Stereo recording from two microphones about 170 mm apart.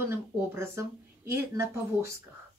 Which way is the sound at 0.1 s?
15° right (ahead or behind).